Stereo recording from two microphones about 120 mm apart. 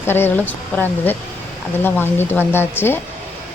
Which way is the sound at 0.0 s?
20° left (ahead or behind).